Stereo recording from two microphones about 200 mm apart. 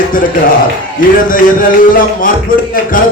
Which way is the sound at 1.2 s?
45° left (ahead or behind).